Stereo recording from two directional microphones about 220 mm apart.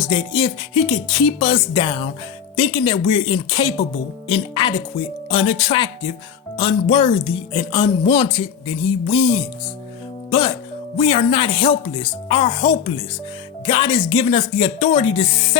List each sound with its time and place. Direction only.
0.1 s speech: 25° left (ahead or behind)
10.2 s speech: 20° left (ahead or behind)